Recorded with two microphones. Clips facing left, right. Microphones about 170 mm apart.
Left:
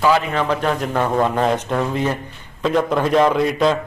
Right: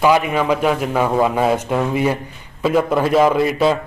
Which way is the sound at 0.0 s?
15° right (ahead or behind).